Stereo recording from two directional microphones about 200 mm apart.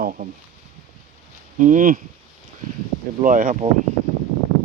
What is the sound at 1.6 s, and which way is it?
Speech, 40° right (ahead or behind).